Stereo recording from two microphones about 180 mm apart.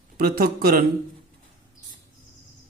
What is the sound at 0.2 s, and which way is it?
Speech, 55° right (ahead or behind).